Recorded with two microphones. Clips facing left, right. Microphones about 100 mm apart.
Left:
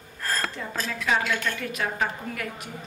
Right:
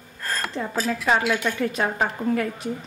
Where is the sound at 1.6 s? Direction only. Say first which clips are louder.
Right 5 dB; 30° right (ahead or behind).